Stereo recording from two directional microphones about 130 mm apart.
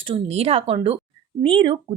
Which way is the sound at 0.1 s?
50° right (ahead or behind).